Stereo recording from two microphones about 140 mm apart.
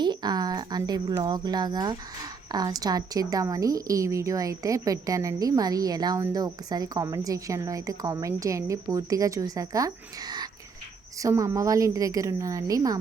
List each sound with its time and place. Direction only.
0.0 s speech: 30° right (ahead or behind)